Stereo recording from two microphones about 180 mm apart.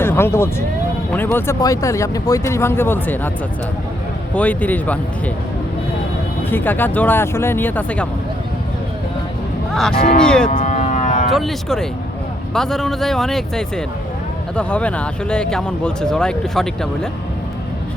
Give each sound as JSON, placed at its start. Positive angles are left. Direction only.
{"t": 0.0, "sound": "speech", "side_deg": 15}
{"t": 4.4, "sound": "speech", "side_deg": 10}
{"t": 6.5, "sound": "speech", "side_deg": 10}
{"t": 10.2, "sound": "speech", "side_deg": 5}
{"t": 10.5, "sound": "cattle", "side_deg": 45}
{"t": 11.3, "sound": "speech", "side_deg": 0}